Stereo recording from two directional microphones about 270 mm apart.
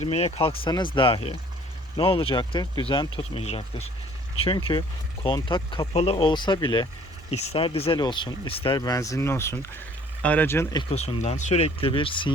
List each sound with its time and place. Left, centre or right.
0.0 s speech: left